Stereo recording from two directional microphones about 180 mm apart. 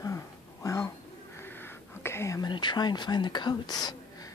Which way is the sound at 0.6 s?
15° left (ahead or behind).